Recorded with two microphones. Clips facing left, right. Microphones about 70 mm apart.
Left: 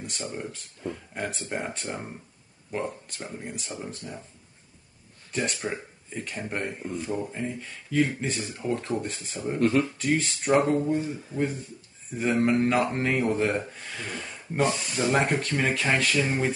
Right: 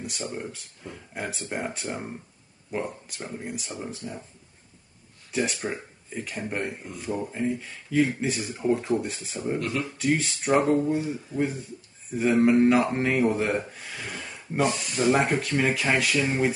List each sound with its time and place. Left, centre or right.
0.0 s speech: centre
5.3 s speech: centre
9.6 s speech: left
9.9 s speech: centre